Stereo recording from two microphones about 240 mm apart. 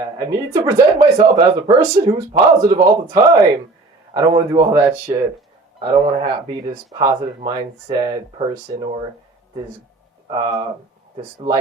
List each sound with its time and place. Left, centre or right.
0.0 s speech: centre
10.2 s speech: centre